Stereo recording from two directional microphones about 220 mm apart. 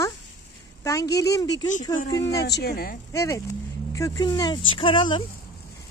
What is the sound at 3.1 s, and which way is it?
Speech, 15° left (ahead or behind).